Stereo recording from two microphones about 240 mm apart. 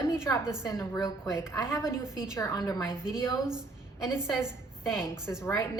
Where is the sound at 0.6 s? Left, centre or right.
Centre.